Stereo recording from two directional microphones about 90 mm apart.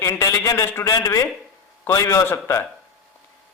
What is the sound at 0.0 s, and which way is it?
A man's voice, 35° left (ahead or behind).